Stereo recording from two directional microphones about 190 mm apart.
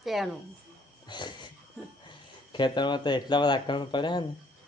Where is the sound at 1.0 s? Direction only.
25° left (ahead or behind).